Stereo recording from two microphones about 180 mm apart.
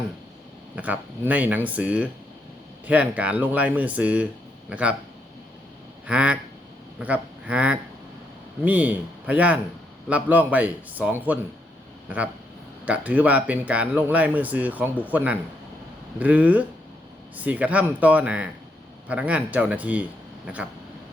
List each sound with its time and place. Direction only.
0.8 s speech: 10° right (ahead or behind)
6.1 s speech: 5° right (ahead or behind)